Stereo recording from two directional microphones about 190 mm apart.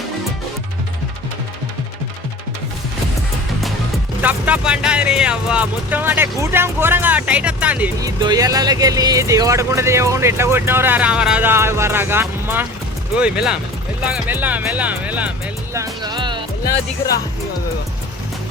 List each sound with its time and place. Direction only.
4.2 s speech: 10° right (ahead or behind)
8.0 s speech: 20° right (ahead or behind)
15.7 s music: 20° right (ahead or behind)